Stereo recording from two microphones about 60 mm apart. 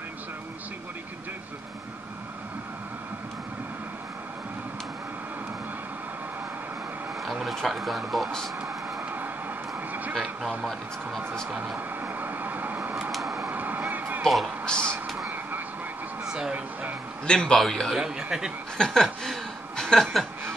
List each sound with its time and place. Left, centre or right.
7.2 s speech: centre
10.7 s speech: centre
11.5 s speech: centre
12.0 s vehicle: right
13.1 s a sound: centre
13.5 s vehicle: right
14.6 s speech: centre
16.3 s a sound: centre
17.3 s a man's voice: centre
17.9 s speech: centre
18.8 s a sound: centre
19.8 s chuckle: centre